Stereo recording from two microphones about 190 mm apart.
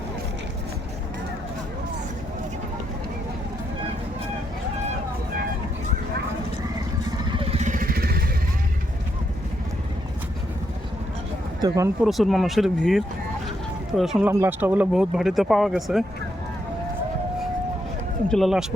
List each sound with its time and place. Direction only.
7.3 s vehicle: 30° right (ahead or behind); by 8.2 s 55° right (ahead or behind)
11.6 s speech: 20° right (ahead or behind)
12.0 s speech: centre (ahead or behind)
18.3 s speech: centre (ahead or behind)